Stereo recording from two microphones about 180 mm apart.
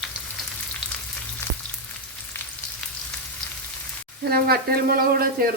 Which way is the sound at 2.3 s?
15° left (ahead or behind).